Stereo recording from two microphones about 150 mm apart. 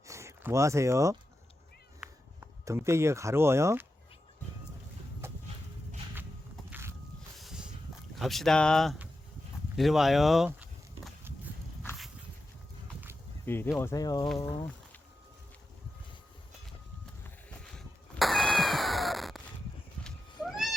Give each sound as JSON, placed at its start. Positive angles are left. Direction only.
{"t": 0.1, "sound": "speech", "side_deg": -20}
{"t": 2.0, "sound": "a sound", "side_deg": -5}
{"t": 2.4, "sound": "speech", "side_deg": -20}
{"t": 5.2, "sound": "vehicle", "side_deg": -15}
{"t": 6.7, "sound": "boat", "side_deg": -15}
{"t": 7.3, "sound": "a sound", "side_deg": 0}
{"t": 8.2, "sound": "speech", "side_deg": 0}
{"t": 9.7, "sound": "a sound", "side_deg": 0}
{"t": 13.4, "sound": "speech", "side_deg": 15}
{"t": 17.6, "sound": "cat", "side_deg": 0}